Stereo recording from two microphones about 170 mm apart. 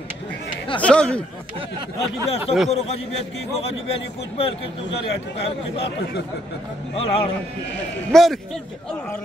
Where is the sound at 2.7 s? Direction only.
40° left (ahead or behind).